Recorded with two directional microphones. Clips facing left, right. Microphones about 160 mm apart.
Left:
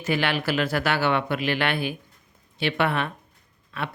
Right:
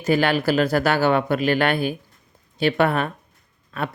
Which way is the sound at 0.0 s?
40° right (ahead or behind).